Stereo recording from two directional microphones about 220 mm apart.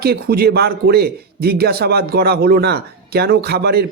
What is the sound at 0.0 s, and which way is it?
Speech, 45° right (ahead or behind).